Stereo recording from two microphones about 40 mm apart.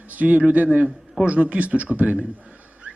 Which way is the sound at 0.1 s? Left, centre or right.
Right.